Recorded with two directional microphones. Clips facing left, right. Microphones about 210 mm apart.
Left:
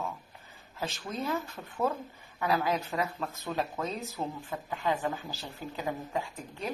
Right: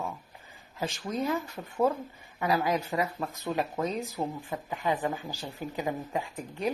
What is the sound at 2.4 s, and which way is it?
Speech, 15° right (ahead or behind).